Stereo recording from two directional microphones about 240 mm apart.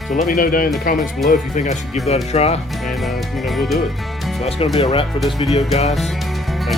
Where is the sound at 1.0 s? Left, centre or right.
Centre.